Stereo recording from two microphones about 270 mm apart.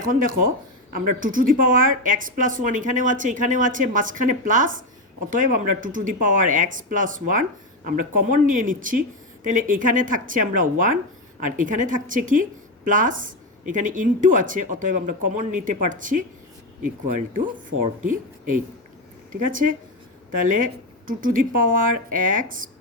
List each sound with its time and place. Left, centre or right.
0.0 s speech: right
18.0 s speech: right